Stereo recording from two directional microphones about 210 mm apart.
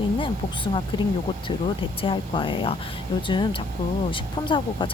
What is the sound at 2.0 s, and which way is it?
Speech, 25° left (ahead or behind).